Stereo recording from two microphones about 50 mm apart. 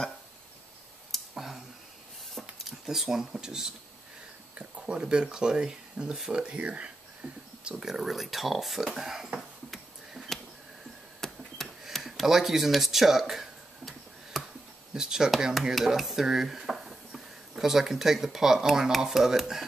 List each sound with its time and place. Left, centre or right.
1.1 s clicking: centre
2.6 s speech: centre; by 6.9 s right
7.8 s speech: centre
10.3 s a sound: centre
15.0 s speech: centre